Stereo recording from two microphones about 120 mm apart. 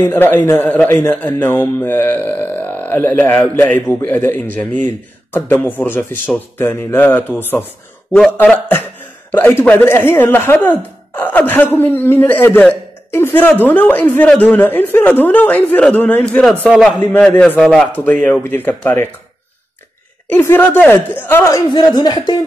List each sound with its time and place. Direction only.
0.0 s a man's voice: 15° left (ahead or behind); by 17.8 s centre (ahead or behind)
17.9 s speech: 15° left (ahead or behind)
20.3 s speech: 15° left (ahead or behind)
21.6 s speech: 40° left (ahead or behind)